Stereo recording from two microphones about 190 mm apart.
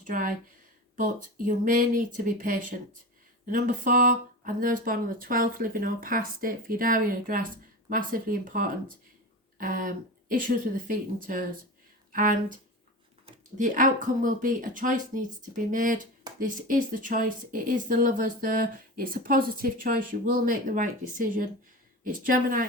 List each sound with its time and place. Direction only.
0.0 s speech: 45° right (ahead or behind)
13.6 s speech: 45° right (ahead or behind)